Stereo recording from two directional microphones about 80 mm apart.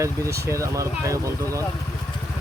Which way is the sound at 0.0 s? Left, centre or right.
Right.